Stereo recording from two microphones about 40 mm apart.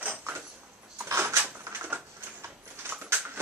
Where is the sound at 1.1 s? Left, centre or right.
Right.